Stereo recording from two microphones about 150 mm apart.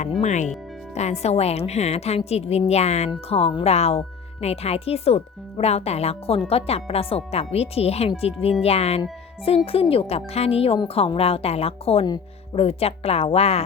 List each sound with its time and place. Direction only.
0.0 s speech: 50° left (ahead or behind)